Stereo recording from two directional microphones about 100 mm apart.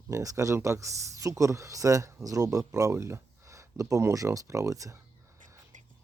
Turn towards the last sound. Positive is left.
turn(degrees=-35)  # may be behind; listen again after turning